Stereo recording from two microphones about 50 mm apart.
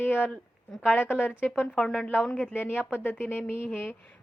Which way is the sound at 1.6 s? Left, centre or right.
Centre.